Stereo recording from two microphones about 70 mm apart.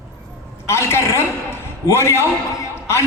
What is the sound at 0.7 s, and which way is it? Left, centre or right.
A man's voice, left.